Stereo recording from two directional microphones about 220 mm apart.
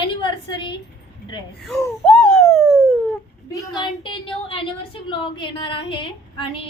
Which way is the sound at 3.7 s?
20° left (ahead or behind).